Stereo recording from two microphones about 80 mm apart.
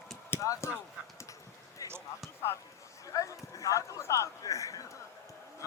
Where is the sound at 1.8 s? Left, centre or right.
Left.